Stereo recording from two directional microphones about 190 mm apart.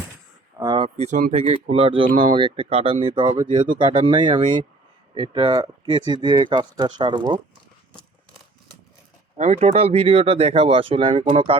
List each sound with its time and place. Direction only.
0.6 s a sound: 20° right (ahead or behind)
0.9 s speech: 40° right (ahead or behind); by 7.3 s 20° right (ahead or behind)
9.4 s speech: 35° right (ahead or behind)